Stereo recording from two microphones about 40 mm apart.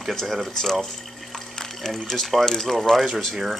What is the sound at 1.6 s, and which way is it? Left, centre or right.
Speech, centre.